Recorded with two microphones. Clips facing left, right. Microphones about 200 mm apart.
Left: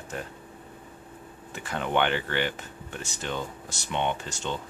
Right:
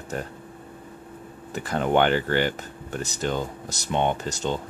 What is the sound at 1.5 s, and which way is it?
Speech, 40° right (ahead or behind).